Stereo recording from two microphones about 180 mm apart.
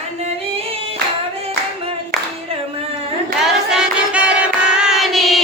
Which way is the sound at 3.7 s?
5° right (ahead or behind).